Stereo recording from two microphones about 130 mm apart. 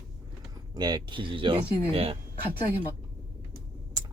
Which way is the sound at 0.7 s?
30° right (ahead or behind).